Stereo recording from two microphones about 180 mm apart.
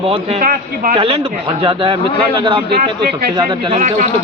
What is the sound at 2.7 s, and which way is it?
Speech, 60° right (ahead or behind).